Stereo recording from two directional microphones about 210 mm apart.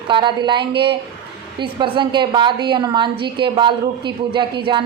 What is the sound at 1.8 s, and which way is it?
A woman's voice, 20° right (ahead or behind).